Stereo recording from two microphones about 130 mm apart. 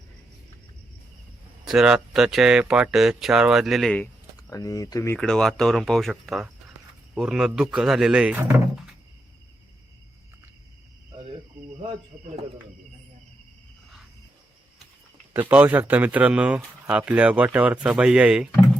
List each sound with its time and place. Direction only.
1.6 s speech: 5° right (ahead or behind)
3.9 s a sound: 10° left (ahead or behind)
4.5 s speech: 25° left (ahead or behind)
5.1 s speech: 5° left (ahead or behind)
15.3 s speech: 15° right (ahead or behind)